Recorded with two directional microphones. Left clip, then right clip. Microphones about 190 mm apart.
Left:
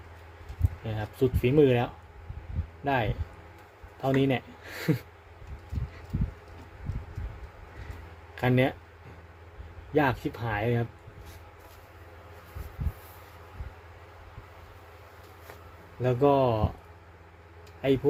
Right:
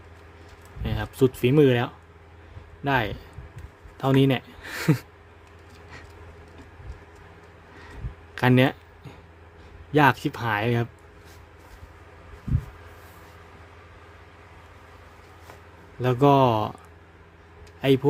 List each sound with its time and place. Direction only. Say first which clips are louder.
0.9 s speech: right 5 dB; 40° right (ahead or behind)
8.4 s speech: right 5 dB; 35° right (ahead or behind)
9.9 s speech: right 6 dB; 35° right (ahead or behind)
16.0 s speech: right 4 dB; 35° right (ahead or behind)
17.8 s speech: right 4 dB; 35° right (ahead or behind)